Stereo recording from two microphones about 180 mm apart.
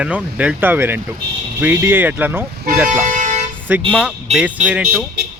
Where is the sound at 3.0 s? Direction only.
45° right (ahead or behind).